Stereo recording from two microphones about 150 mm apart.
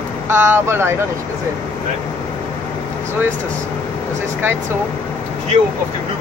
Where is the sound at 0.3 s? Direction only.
15° right (ahead or behind).